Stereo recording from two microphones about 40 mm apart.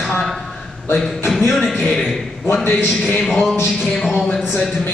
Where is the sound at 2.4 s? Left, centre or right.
Left.